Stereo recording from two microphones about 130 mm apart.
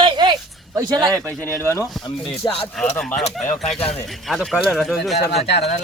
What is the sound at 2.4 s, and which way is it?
Speech, 30° left (ahead or behind).